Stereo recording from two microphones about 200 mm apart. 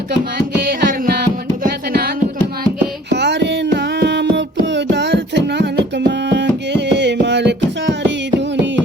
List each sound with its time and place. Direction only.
0.3 s music: 45° right (ahead or behind)
3.1 s music: 60° right (ahead or behind)